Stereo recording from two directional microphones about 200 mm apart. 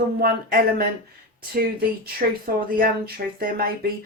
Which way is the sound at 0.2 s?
50° right (ahead or behind).